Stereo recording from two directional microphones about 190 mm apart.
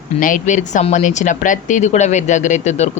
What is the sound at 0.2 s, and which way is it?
A woman's voice, 45° left (ahead or behind).